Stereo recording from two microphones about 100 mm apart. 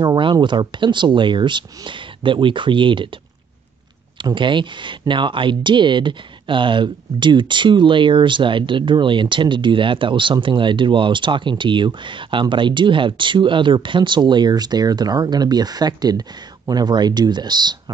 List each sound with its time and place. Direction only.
0.0 s speech: 45° right (ahead or behind)
4.2 s speech: 55° right (ahead or behind)